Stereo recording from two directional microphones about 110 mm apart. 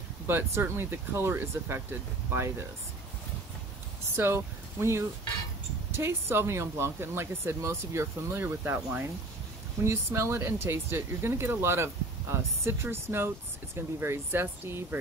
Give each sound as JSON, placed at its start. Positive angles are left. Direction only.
{"t": 0.3, "sound": "speech", "side_deg": -20}
{"t": 4.1, "sound": "speech", "side_deg": -25}